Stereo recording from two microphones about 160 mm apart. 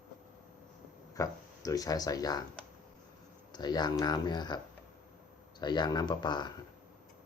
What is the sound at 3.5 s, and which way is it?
Speech, 25° left (ahead or behind).